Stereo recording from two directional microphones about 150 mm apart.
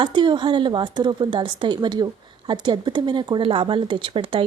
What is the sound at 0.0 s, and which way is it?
Speech, 30° right (ahead or behind).